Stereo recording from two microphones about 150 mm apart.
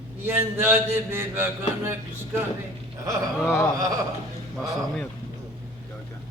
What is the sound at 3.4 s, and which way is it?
Speech, 20° left (ahead or behind).